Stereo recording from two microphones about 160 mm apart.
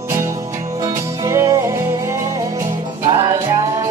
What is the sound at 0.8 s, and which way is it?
Music, 20° right (ahead or behind).